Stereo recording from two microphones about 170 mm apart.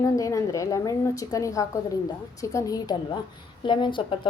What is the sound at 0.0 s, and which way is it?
A woman's voice, 20° left (ahead or behind).